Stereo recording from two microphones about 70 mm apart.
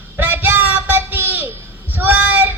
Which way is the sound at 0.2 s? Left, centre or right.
Right.